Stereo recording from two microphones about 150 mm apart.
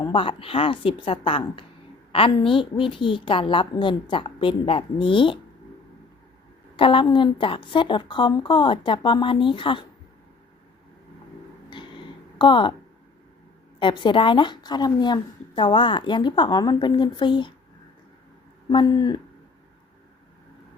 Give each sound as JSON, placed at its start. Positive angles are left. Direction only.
{"t": 0.0, "sound": "a woman's voice", "side_deg": 35}
{"t": 6.7, "sound": "a woman's voice", "side_deg": 35}
{"t": 11.7, "sound": "a sound", "side_deg": 30}
{"t": 13.7, "sound": "a woman's voice", "side_deg": 30}
{"t": 18.7, "sound": "speech", "side_deg": 30}